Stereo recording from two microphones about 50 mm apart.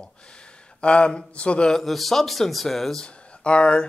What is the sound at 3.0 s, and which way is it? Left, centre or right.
Speech, left.